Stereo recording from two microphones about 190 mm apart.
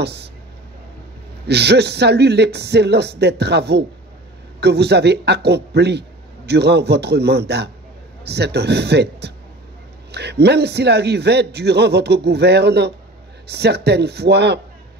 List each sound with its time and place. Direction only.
0.0 s speech: 60° right (ahead or behind)
1.5 s a man's voice: 60° right (ahead or behind)